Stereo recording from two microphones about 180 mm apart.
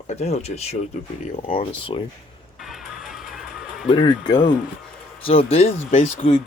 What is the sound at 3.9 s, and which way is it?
Speech, 25° left (ahead or behind).